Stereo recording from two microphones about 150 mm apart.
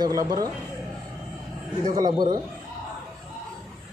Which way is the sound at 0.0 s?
25° right (ahead or behind).